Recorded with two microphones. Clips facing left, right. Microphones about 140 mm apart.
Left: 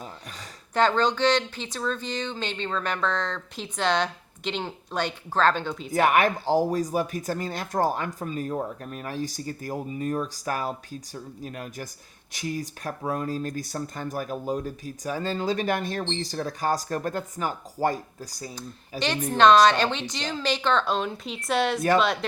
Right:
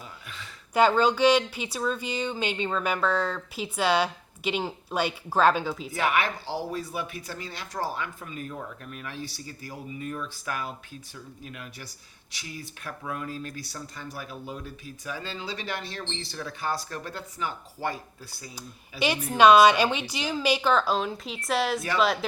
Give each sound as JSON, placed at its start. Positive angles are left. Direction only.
{"t": 0.7, "sound": "speech", "side_deg": -10}
{"t": 5.9, "sound": "speech", "side_deg": 45}
{"t": 18.5, "sound": "speech", "side_deg": -10}